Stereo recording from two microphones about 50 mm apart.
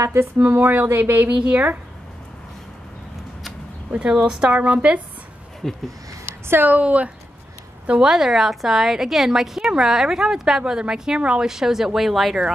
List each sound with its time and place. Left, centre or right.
0.2 s speech: right
4.0 s a woman's voice: centre
4.6 s speech: right
5.6 s speech: centre
6.6 s speech: right
8.0 s a woman's voice: centre